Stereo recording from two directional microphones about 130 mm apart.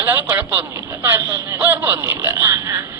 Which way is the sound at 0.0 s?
15° right (ahead or behind).